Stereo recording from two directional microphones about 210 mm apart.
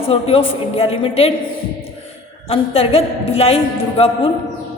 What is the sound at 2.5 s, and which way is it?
A woman's voice, 30° left (ahead or behind).